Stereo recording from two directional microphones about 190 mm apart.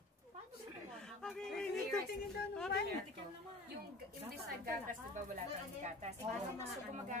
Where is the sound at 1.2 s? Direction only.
5° left (ahead or behind).